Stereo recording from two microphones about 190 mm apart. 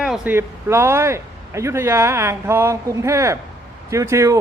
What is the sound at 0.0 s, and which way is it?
A man's voice, 5° right (ahead or behind).